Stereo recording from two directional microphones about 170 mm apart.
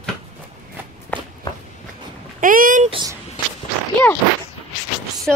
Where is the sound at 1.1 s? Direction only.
10° left (ahead or behind).